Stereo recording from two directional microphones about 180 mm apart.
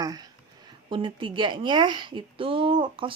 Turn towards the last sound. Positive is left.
turn(degrees=-30)  # may be behind; listen again after turning